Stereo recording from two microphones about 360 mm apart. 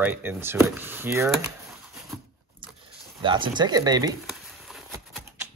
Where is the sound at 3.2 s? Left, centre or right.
Centre.